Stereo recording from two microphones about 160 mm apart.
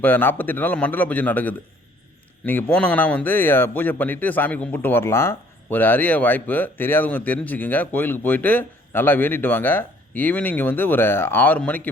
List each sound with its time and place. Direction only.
0.0 s speech: 10° left (ahead or behind)